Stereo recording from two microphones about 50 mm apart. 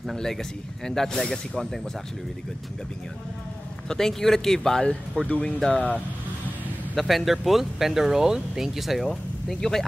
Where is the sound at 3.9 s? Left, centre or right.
Centre.